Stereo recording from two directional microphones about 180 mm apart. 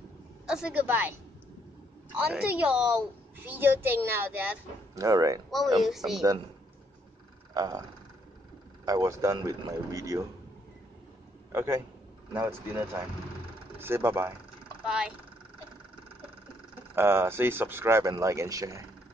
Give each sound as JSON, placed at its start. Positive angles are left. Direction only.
{"t": 0.5, "sound": "speech", "side_deg": -5}
{"t": 2.1, "sound": "speech", "side_deg": -10}
{"t": 5.8, "sound": "speech", "side_deg": 0}
{"t": 7.5, "sound": "speech", "side_deg": -20}
{"t": 8.8, "sound": "speech", "side_deg": -20}
{"t": 11.5, "sound": "speech", "side_deg": -15}
{"t": 16.9, "sound": "speech", "side_deg": -15}